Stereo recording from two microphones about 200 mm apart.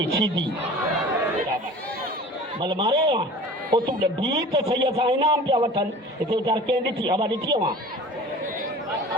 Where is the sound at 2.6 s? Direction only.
25° right (ahead or behind).